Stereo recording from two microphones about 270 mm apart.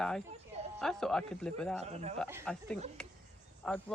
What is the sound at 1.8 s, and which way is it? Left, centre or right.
Speech, right.